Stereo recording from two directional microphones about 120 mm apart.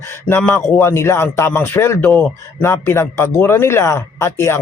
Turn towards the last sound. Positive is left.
turn(degrees=20)  # may be behind; listen again after turning